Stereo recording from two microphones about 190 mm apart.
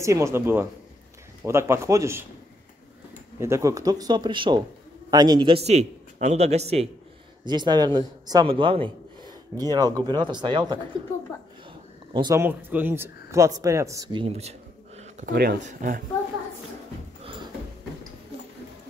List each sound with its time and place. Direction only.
0.0 s a man's voice: 15° right (ahead or behind)
3.3 s a man's voice: 15° right (ahead or behind); by 6.9 s 35° right (ahead or behind)
7.4 s a man's voice: 20° right (ahead or behind)
12.1 s speech: 20° right (ahead or behind)
12.4 s speech: 10° right (ahead or behind); by 15.3 s 35° right (ahead or behind)
15.3 s speech: 55° right (ahead or behind)
15.6 s speech: 45° right (ahead or behind)
17.2 s a sound: 25° right (ahead or behind)